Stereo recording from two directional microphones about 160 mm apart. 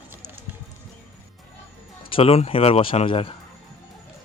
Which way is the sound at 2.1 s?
35° left (ahead or behind).